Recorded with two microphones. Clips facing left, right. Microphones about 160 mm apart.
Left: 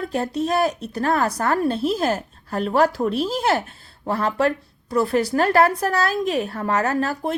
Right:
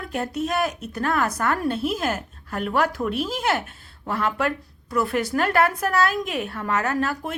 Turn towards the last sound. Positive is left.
turn(degrees=35)  # may be behind; listen again after turning